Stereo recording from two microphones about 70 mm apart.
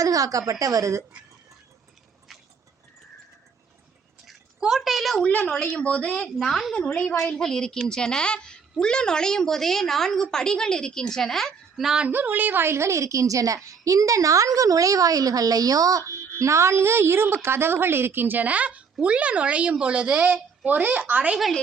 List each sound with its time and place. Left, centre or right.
0.0 s a sound: right
0.6 s a woman's voice: right
4.3 s a sound: centre
5.7 s a woman's voice: centre
6.1 s a woman's voice: centre
6.8 s a woman's voice: centre
12.0 s a woman's voice: right